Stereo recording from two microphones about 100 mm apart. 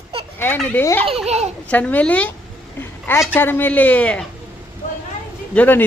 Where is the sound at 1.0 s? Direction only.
90° right.